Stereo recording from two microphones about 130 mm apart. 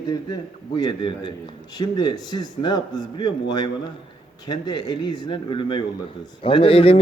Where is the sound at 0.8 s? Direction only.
35° left (ahead or behind).